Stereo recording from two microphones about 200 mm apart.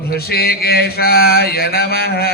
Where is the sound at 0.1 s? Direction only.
50° left (ahead or behind).